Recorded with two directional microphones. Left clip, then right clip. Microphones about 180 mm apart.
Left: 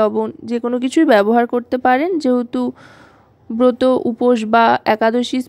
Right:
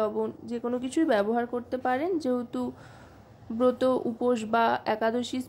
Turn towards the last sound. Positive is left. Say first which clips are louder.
# left 12 dB
turn(degrees=40)  # may be behind; listen again after turning